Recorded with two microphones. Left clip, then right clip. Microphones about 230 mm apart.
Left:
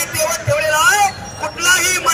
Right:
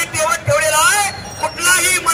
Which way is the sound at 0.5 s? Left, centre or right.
Centre.